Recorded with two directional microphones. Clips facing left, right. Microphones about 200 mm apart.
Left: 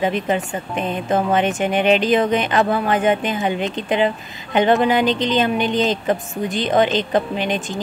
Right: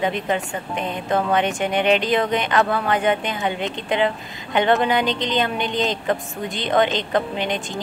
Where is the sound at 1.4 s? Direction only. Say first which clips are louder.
Left 3 dB; 20° right (ahead or behind).